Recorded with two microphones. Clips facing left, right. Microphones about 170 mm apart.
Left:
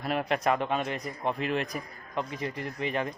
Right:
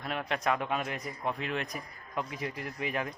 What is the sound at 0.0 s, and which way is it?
Speech, 5° left (ahead or behind).